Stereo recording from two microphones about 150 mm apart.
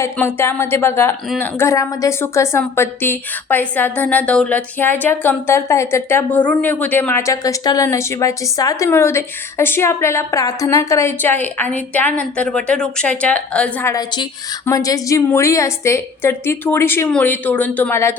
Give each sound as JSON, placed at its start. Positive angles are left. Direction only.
{"t": 0.2, "sound": "a woman's voice", "side_deg": 15}
{"t": 13.9, "sound": "a woman's voice", "side_deg": 30}